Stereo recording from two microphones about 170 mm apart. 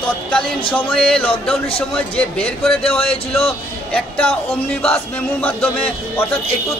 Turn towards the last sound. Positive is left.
turn(degrees=10)  # may be behind; listen again after turning